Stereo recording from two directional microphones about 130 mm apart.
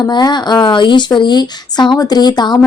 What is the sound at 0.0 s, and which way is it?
A woman's voice, 30° left (ahead or behind).